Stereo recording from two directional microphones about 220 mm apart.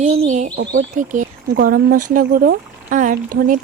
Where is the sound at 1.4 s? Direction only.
45° right (ahead or behind).